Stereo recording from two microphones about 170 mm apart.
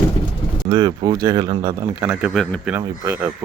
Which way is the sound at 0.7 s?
25° right (ahead or behind).